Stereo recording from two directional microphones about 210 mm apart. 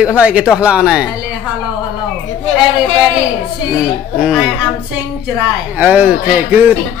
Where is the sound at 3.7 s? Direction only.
5° right (ahead or behind).